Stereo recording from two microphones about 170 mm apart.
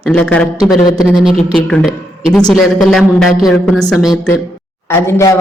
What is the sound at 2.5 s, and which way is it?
A woman's voice, centre (ahead or behind).